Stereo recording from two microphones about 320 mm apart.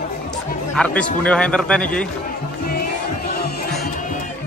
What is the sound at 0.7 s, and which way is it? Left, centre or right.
A man's voice, centre.